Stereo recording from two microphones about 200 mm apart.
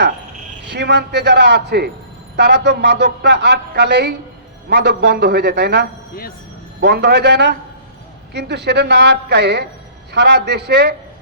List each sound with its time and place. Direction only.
0.7 s speech: 60° right (ahead or behind)